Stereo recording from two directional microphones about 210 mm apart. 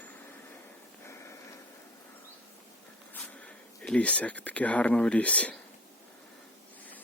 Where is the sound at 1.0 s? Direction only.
15° left (ahead or behind).